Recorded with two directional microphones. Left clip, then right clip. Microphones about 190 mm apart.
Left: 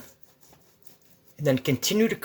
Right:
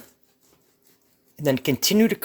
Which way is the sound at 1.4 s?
45° right (ahead or behind).